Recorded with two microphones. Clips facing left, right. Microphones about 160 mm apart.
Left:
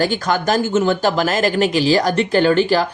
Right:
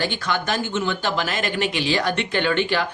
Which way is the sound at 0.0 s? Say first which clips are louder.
Left 7 dB; 40° left (ahead or behind).